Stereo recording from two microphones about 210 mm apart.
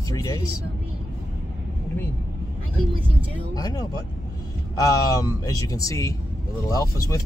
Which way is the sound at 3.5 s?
20° left (ahead or behind).